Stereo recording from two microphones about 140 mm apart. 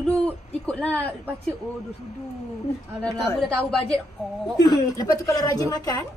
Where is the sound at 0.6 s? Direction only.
10° left (ahead or behind).